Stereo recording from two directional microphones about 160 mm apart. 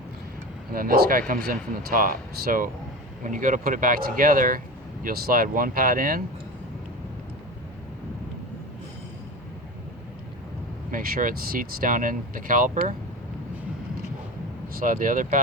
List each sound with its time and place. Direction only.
0.7 s speech: 65° right (ahead or behind)
10.9 s speech: 60° right (ahead or behind)
14.8 s speech: 60° right (ahead or behind)